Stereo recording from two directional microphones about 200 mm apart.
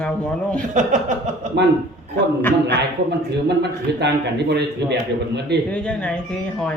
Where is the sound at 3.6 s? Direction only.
55° right (ahead or behind).